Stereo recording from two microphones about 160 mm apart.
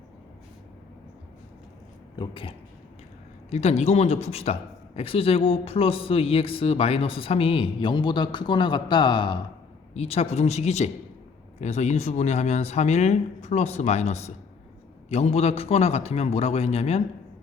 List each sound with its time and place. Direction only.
2.1 s speech: 30° left (ahead or behind)
9.9 s speech: 40° left (ahead or behind)